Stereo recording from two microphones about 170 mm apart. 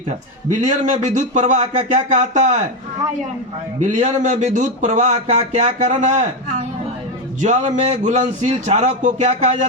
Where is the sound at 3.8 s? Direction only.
45° right (ahead or behind).